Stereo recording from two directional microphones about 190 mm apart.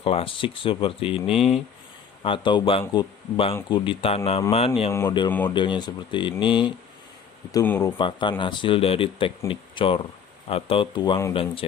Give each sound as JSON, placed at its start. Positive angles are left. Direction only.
{"t": 0.0, "sound": "speech", "side_deg": 30}
{"t": 4.9, "sound": "speech", "side_deg": 15}
{"t": 5.5, "sound": "speech", "side_deg": 25}
{"t": 7.5, "sound": "speech", "side_deg": 15}
{"t": 7.9, "sound": "speech", "side_deg": 25}